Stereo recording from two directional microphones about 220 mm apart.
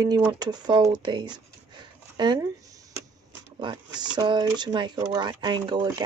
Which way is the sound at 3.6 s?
20° right (ahead or behind).